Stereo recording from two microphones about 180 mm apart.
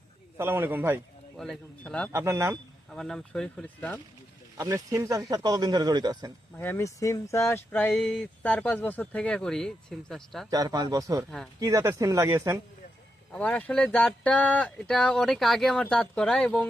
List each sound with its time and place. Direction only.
0.3 s speech: 10° right (ahead or behind)
1.4 s speech: 5° left (ahead or behind)
2.1 s speech: 15° right (ahead or behind)
2.9 s speech: 5° left (ahead or behind)
4.5 s speech: 20° right (ahead or behind)
6.6 s speech: 10° left (ahead or behind)
10.5 s speech: 20° right (ahead or behind)
13.3 s speech: 5° left (ahead or behind)